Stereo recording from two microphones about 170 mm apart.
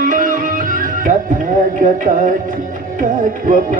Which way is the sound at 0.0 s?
50° right (ahead or behind).